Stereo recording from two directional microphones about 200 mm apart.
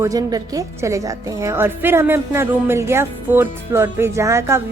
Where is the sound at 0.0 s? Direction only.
15° right (ahead or behind).